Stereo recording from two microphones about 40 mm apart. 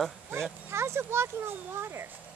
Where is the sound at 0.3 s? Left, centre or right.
Right.